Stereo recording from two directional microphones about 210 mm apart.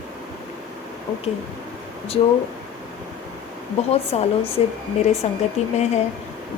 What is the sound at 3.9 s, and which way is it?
A woman's voice, 30° left (ahead or behind).